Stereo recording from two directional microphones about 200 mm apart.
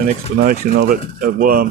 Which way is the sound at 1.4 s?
45° right (ahead or behind).